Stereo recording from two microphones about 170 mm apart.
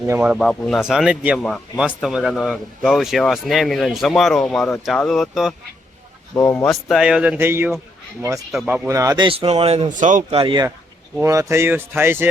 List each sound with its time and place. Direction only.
0.1 s speech: 10° right (ahead or behind)
1.4 s speech: 5° left (ahead or behind)
6.3 s speech: 15° left (ahead or behind)
6.8 s speech: centre (ahead or behind)
8.9 s speech: 20° right (ahead or behind); by 9.9 s 35° right (ahead or behind)
9.9 s speech: 50° right (ahead or behind)
10.3 s speech: 25° right (ahead or behind)
11.2 s speech: 15° right (ahead or behind)